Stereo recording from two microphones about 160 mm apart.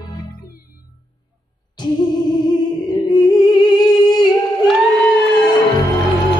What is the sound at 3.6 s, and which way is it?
Music, 25° left (ahead or behind).